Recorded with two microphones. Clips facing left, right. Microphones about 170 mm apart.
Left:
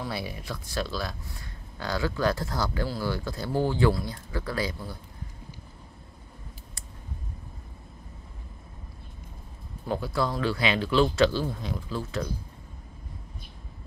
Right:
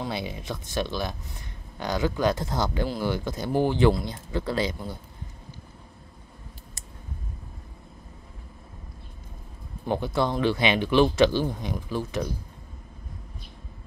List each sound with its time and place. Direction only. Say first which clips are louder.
0.0 s speech: right 2 dB; 20° right (ahead or behind)
9.8 s speech: right 3 dB; 20° right (ahead or behind)